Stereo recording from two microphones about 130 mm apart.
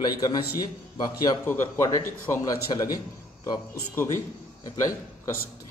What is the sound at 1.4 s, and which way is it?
Speech, 15° left (ahead or behind).